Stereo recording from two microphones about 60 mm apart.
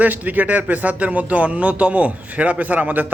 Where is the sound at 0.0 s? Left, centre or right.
Right.